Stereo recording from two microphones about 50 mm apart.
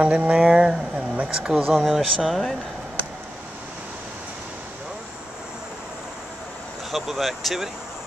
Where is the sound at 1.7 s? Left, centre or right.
Centre.